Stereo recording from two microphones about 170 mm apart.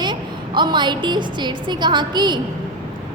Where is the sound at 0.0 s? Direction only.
25° right (ahead or behind).